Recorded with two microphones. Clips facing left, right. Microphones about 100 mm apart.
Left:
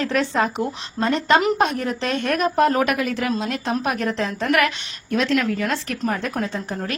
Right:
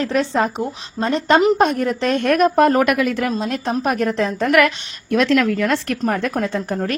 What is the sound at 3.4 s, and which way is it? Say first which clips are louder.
A woman's voice: right 3 dB; 40° right (ahead or behind).